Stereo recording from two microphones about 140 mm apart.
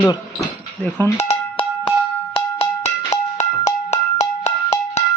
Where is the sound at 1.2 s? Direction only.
50° left (ahead or behind).